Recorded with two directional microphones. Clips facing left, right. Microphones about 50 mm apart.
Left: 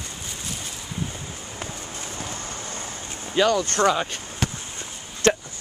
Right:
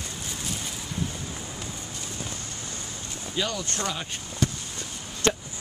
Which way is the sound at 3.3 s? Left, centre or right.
Left.